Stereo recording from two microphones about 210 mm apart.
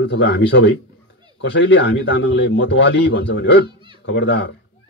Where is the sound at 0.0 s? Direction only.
55° left (ahead or behind).